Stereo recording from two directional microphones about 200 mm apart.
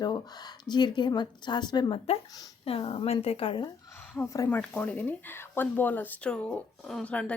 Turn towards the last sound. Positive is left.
turn(degrees=5)  # may be behind; listen again after turning